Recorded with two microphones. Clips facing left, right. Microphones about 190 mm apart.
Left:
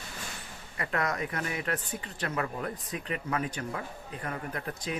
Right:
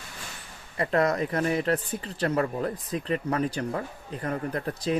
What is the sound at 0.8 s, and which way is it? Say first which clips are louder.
Speech: right 7 dB; 30° right (ahead or behind).